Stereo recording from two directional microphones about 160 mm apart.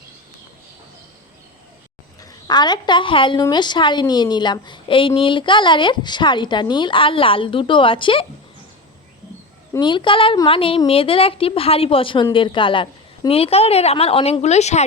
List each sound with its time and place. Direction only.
2.2 s a woman's voice: 25° left (ahead or behind)
9.7 s a woman's voice: 30° left (ahead or behind)